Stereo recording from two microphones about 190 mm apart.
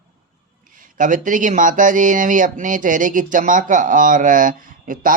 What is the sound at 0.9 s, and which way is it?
Speech, 45° right (ahead or behind).